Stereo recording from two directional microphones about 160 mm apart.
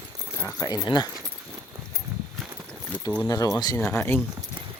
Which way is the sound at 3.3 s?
20° left (ahead or behind).